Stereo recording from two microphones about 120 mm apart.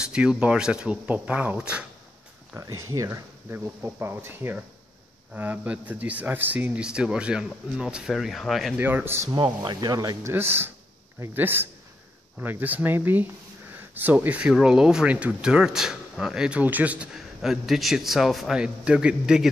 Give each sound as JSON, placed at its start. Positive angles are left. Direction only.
{"t": 0.0, "sound": "speech", "side_deg": -5}
{"t": 2.5, "sound": "speech", "side_deg": -30}
{"t": 8.7, "sound": "speech", "side_deg": -15}
{"t": 9.3, "sound": "speech", "side_deg": -35}
{"t": 10.3, "sound": "speech", "side_deg": -20}